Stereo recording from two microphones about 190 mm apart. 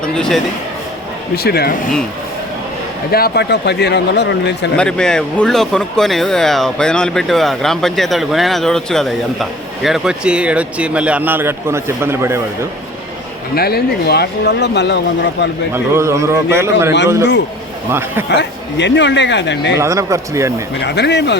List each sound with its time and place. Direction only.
0.0 s speech: 5° left (ahead or behind)
1.4 s speech: 55° left (ahead or behind)
3.1 s speech: 55° left (ahead or behind)
4.8 s speech: 5° left (ahead or behind); by 12.4 s 15° right (ahead or behind)
13.6 s speech: 55° left (ahead or behind)
15.7 s a man's voice: 15° right (ahead or behind)
17.9 s a man's voice: 10° right (ahead or behind)
18.3 s speech: 65° left (ahead or behind)
19.8 s a man's voice: 15° right (ahead or behind)
20.8 s speech: 65° left (ahead or behind)